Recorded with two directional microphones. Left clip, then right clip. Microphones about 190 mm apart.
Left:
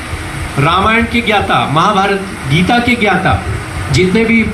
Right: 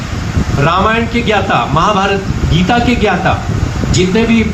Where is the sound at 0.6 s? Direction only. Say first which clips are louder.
Left 1 dB; 40° left (ahead or behind).